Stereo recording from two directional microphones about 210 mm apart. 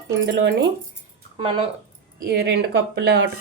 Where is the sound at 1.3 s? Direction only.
25° right (ahead or behind).